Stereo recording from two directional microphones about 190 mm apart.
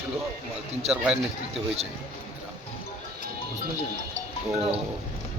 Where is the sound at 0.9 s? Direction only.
5° right (ahead or behind).